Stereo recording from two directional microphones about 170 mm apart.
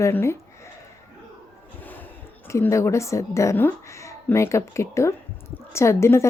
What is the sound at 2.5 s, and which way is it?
A woman's voice, 15° left (ahead or behind).